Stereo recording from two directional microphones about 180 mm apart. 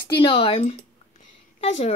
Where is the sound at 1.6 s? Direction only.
40° left (ahead or behind).